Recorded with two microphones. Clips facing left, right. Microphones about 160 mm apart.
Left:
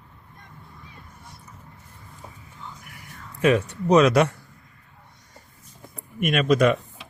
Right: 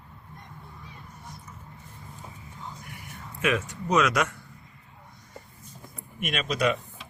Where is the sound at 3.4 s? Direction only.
35° left (ahead or behind).